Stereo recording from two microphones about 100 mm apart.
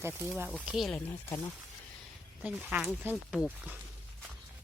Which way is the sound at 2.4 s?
15° right (ahead or behind).